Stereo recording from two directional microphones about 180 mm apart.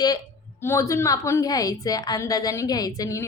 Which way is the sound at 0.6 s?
15° left (ahead or behind).